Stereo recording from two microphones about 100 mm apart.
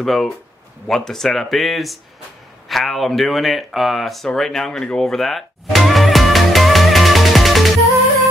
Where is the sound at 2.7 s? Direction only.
Centre (ahead or behind).